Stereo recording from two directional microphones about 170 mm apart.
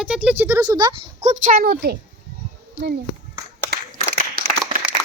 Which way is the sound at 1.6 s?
65° right (ahead or behind).